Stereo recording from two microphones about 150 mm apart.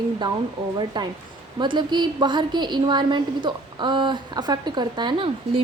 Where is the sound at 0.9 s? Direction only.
30° right (ahead or behind).